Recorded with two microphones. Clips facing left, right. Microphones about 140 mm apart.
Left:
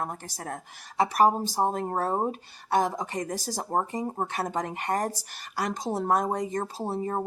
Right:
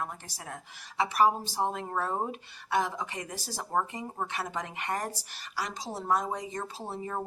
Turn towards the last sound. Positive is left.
turn(degrees=40)  # may be behind; listen again after turning